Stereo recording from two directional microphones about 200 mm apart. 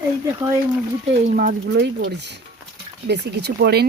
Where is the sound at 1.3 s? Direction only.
45° right (ahead or behind).